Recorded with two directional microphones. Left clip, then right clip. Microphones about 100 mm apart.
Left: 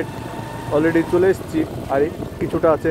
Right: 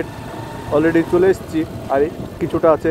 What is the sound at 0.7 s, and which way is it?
Speech, 25° right (ahead or behind).